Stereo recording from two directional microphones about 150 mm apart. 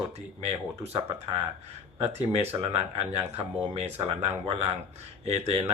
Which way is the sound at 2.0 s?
45° right (ahead or behind).